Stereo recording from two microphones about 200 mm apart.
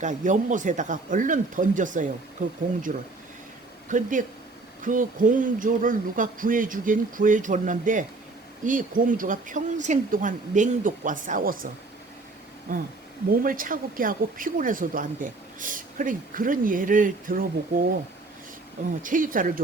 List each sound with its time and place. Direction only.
0.0 s speech: 40° right (ahead or behind)
19.0 s speech: 45° right (ahead or behind)